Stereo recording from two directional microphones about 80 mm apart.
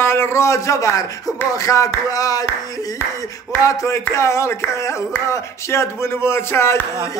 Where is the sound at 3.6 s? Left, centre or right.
Left.